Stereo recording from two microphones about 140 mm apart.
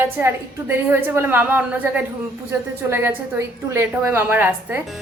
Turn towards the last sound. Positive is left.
turn(degrees=-15)  # may be behind; listen again after turning